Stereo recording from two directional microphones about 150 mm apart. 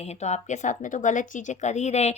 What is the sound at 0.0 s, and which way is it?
A woman's voice, 45° left (ahead or behind).